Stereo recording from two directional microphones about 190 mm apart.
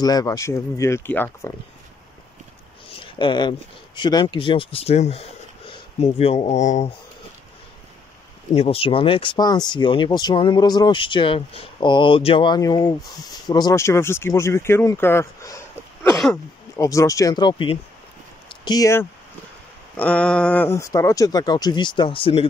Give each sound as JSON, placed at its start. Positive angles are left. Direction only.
{"t": 0.0, "sound": "speech", "side_deg": 20}
{"t": 2.9, "sound": "speech", "side_deg": 25}
{"t": 8.5, "sound": "speech", "side_deg": 30}
{"t": 20.0, "sound": "speech", "side_deg": 5}